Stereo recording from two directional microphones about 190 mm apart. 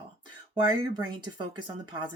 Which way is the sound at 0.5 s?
25° right (ahead or behind).